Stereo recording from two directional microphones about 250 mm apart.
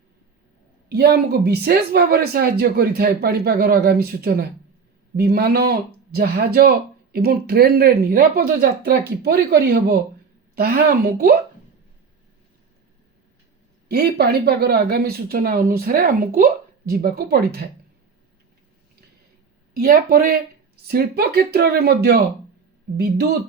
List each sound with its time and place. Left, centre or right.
0.9 s speech: right
13.8 s speech: right
19.7 s speech: right